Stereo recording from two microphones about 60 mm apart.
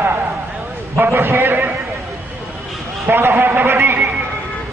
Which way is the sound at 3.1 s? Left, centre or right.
Right.